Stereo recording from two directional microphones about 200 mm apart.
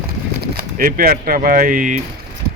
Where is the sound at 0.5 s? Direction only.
45° right (ahead or behind).